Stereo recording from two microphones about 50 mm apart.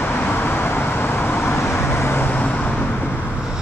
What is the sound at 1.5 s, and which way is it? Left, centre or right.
Vehicle, left.